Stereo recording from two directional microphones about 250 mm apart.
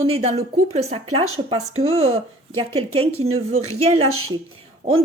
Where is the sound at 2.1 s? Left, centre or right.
Right.